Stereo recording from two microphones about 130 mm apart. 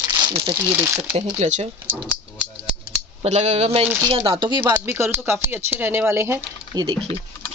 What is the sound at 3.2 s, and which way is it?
Speech, 60° right (ahead or behind).